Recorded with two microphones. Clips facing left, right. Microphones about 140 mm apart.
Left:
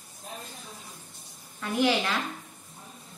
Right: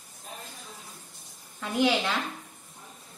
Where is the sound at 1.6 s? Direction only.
15° right (ahead or behind).